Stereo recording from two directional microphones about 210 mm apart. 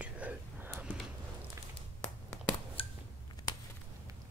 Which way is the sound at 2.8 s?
25° left (ahead or behind).